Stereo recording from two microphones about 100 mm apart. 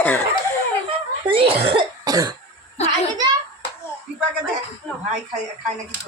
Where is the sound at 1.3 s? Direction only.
70° right (ahead or behind).